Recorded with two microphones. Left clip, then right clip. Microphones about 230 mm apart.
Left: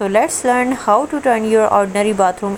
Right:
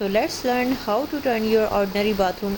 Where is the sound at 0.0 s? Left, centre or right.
Centre.